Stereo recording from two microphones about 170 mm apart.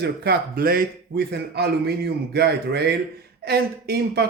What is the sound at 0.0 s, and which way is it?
Speech, 65° right (ahead or behind).